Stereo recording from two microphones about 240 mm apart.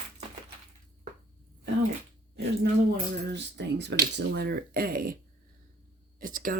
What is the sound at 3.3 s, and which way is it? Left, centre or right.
Speech, right.